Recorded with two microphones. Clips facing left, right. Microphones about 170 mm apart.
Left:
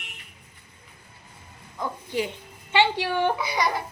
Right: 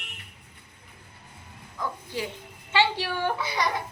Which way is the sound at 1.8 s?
20° left (ahead or behind).